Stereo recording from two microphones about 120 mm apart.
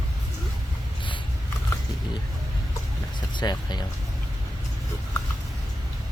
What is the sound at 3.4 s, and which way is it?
Speech, 35° left (ahead or behind).